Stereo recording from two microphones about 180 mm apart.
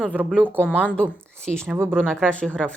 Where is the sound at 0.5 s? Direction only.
10° left (ahead or behind).